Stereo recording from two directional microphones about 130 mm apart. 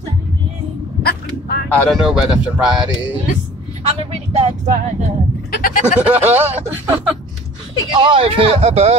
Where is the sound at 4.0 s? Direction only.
50° right (ahead or behind).